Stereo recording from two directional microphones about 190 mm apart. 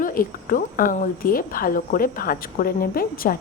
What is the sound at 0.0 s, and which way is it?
A woman's voice, 50° left (ahead or behind).